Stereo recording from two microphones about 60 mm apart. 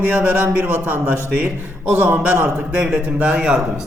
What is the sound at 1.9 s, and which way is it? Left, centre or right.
A man's voice, right.